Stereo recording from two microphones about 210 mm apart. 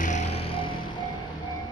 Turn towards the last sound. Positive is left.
turn(degrees=30)  # may be behind; listen again after turning